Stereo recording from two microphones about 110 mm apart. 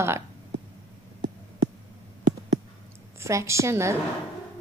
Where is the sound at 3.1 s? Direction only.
25° right (ahead or behind).